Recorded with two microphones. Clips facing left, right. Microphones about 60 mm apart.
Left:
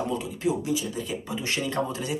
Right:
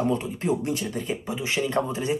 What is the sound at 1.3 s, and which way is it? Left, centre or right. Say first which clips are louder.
Speech: right 4 dB; right.